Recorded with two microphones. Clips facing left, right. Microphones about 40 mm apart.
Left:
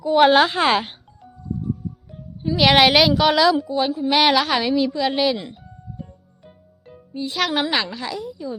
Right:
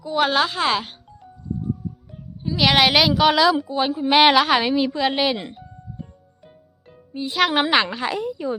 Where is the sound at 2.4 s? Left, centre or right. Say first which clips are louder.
Left 3 dB; centre.